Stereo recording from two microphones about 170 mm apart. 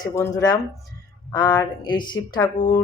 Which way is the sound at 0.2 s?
20° left (ahead or behind).